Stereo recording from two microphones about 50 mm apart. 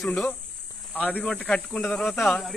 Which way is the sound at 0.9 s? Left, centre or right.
Left.